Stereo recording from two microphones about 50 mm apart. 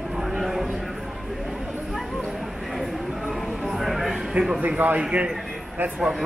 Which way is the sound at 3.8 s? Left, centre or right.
Centre.